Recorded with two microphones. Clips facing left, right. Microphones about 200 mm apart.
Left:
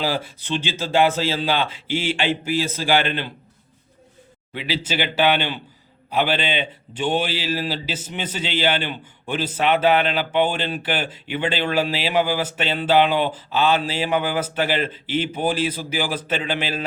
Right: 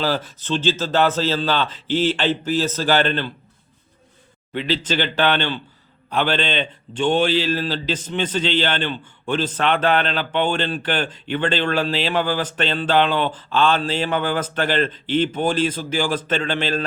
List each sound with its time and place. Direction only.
0.0 s a man's voice: 10° left (ahead or behind)
4.5 s a man's voice: 10° left (ahead or behind)